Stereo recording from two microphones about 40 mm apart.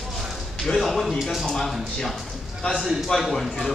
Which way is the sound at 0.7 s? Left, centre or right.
Left.